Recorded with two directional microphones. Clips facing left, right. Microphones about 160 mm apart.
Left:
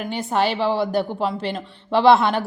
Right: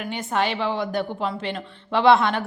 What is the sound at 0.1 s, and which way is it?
A woman's voice, 35° left (ahead or behind).